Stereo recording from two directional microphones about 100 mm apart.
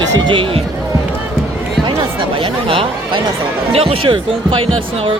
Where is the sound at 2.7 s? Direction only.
65° right (ahead or behind).